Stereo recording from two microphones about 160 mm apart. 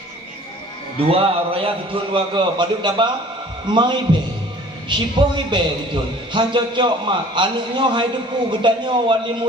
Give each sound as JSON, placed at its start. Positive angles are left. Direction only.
{"t": 1.0, "sound": "a man's voice", "side_deg": -35}